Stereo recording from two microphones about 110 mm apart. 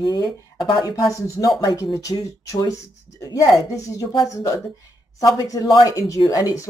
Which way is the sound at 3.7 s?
35° left (ahead or behind).